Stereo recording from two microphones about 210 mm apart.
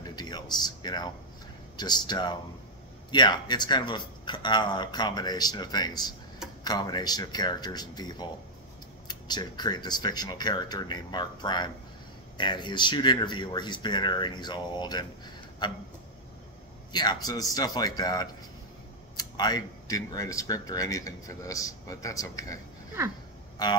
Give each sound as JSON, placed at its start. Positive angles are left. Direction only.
{"t": 0.0, "sound": "a sound", "side_deg": 20}
{"t": 1.8, "sound": "speech", "side_deg": 20}
{"t": 16.9, "sound": "speech", "side_deg": 20}
{"t": 23.6, "sound": "speech", "side_deg": 20}